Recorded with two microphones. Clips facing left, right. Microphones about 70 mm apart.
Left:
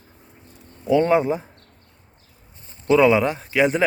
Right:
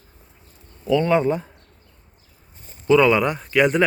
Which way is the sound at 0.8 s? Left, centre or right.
Left.